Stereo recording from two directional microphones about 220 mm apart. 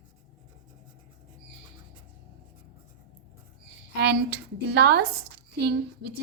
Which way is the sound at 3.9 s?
50° right (ahead or behind).